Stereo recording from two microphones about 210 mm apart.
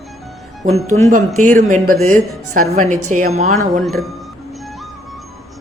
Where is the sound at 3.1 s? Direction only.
35° right (ahead or behind).